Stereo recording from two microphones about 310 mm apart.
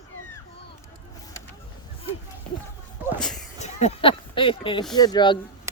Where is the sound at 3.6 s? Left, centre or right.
Centre.